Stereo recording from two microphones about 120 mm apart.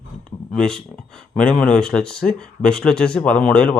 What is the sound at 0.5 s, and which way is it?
Speech, 5° left (ahead or behind).